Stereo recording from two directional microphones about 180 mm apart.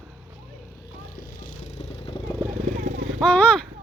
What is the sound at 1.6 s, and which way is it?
Vehicle, 40° left (ahead or behind).